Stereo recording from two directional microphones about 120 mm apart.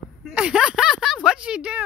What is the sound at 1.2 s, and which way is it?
Speech, 10° right (ahead or behind).